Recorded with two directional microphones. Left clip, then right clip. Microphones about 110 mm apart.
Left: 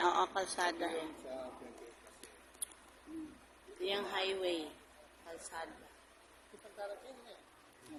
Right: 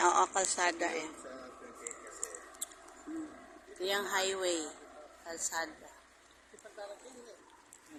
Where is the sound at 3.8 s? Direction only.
55° right (ahead or behind).